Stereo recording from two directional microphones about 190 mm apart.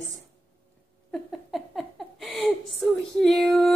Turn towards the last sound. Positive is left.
turn(degrees=0)  # may be behind; listen again after turning